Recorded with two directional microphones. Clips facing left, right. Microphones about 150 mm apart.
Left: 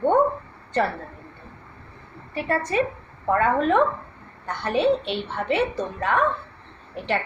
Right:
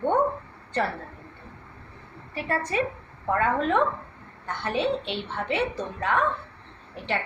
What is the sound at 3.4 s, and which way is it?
Speech, 55° left (ahead or behind).